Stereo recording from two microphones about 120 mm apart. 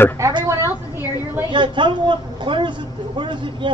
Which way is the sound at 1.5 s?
40° right (ahead or behind).